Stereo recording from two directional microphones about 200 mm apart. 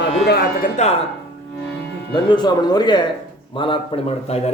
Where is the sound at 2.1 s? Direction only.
20° left (ahead or behind).